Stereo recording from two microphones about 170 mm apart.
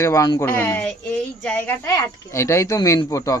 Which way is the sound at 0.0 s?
20° left (ahead or behind).